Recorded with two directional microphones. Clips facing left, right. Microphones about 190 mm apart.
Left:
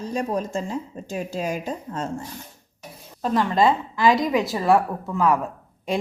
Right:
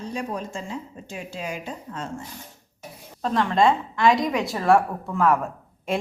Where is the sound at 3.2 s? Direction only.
5° left (ahead or behind).